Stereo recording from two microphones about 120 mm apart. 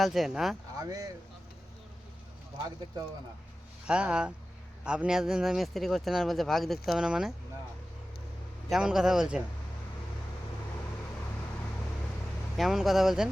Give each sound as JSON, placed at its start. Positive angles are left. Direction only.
{"t": 0.0, "sound": "speech", "side_deg": 0}
{"t": 0.8, "sound": "speech", "side_deg": -30}
{"t": 3.8, "sound": "speech", "side_deg": -10}
{"t": 8.7, "sound": "speech", "side_deg": -5}
{"t": 12.5, "sound": "speech", "side_deg": 0}